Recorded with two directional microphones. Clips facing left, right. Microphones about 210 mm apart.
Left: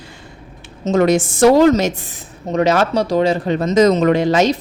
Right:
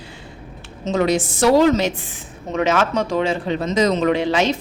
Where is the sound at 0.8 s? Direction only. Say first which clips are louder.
Left 5 dB; 50° left (ahead or behind).